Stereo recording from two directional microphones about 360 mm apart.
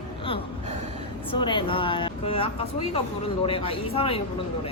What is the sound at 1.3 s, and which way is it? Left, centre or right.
Speech, centre.